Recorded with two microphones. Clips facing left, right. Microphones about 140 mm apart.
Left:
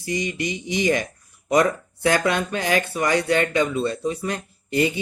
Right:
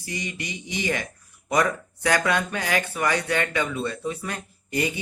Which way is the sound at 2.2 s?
25° left (ahead or behind).